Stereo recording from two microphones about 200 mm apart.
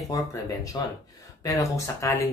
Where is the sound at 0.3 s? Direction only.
15° left (ahead or behind).